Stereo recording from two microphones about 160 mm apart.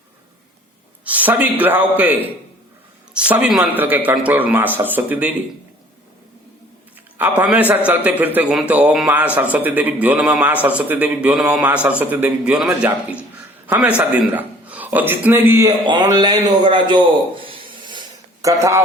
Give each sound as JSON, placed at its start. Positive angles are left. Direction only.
{"t": 1.0, "sound": "a man's voice", "side_deg": -10}
{"t": 7.2, "sound": "a man's voice", "side_deg": -10}
{"t": 17.5, "sound": "a sound", "side_deg": -30}
{"t": 18.4, "sound": "a man's voice", "side_deg": -20}